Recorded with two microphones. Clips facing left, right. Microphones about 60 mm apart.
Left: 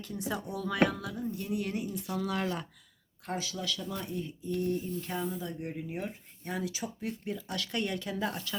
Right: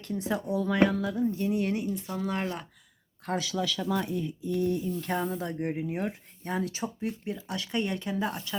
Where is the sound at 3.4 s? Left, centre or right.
Right.